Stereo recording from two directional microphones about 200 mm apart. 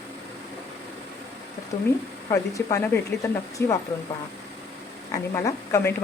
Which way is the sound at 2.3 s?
15° left (ahead or behind).